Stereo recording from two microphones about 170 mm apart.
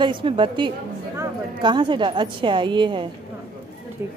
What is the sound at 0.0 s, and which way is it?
A woman's voice, 30° right (ahead or behind).